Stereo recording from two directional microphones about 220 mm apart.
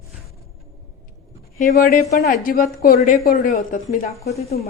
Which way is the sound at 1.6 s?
40° left (ahead or behind).